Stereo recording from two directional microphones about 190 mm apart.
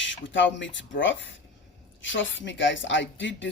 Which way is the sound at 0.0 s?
75° left (ahead or behind).